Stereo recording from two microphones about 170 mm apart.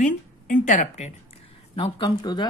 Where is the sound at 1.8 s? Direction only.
25° left (ahead or behind).